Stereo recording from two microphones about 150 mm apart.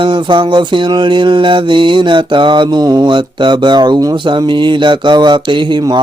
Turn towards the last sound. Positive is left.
turn(degrees=-30)  # may be behind; listen again after turning